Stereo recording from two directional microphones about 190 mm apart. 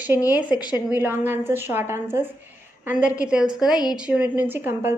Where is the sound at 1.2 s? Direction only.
10° right (ahead or behind).